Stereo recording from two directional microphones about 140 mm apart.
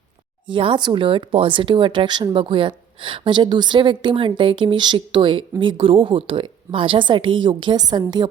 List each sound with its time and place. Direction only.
0.4 s speech: 35° right (ahead or behind)